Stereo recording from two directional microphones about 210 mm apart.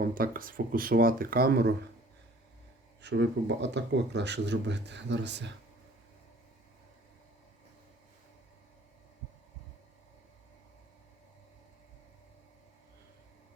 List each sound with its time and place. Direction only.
0.0 s speech: 45° right (ahead or behind)
3.0 s speech: 55° right (ahead or behind)